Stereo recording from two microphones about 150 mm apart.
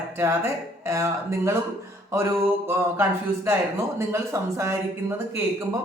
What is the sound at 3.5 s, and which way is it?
Speech, 20° right (ahead or behind).